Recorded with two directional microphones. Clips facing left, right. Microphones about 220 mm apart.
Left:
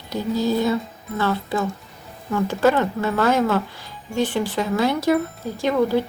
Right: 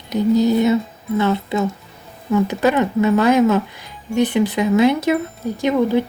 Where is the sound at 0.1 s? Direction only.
20° right (ahead or behind).